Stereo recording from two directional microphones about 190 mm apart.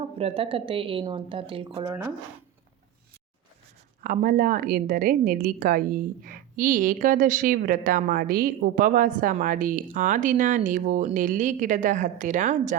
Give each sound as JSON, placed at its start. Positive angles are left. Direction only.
{"t": 0.2, "sound": "speech", "side_deg": -30}
{"t": 1.9, "sound": "speech", "side_deg": -15}
{"t": 4.0, "sound": "a woman's voice", "side_deg": -45}